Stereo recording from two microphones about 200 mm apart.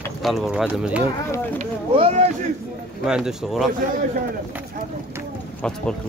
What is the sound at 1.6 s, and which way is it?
Vehicle, 30° right (ahead or behind).